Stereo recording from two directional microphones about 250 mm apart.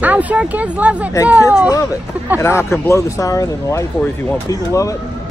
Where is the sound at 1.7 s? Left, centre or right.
Centre.